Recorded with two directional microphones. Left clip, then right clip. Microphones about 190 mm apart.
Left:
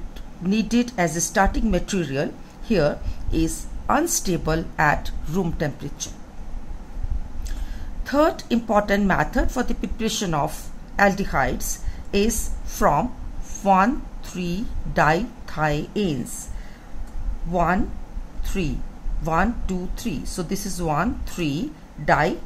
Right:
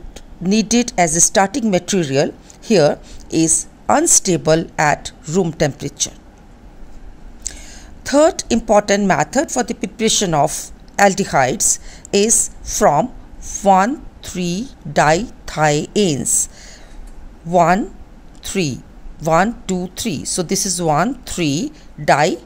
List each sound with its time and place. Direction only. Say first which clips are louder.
0.5 s speech: right 6 dB; 45° right (ahead or behind)
7.5 s a sound: right 13 dB; 45° right (ahead or behind)
8.0 s a woman's voice: right 7 dB; 45° right (ahead or behind)
17.5 s speech: right 9 dB; 50° right (ahead or behind)